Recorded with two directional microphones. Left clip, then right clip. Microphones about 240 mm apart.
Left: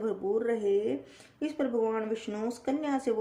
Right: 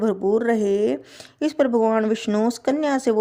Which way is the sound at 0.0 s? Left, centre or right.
Right.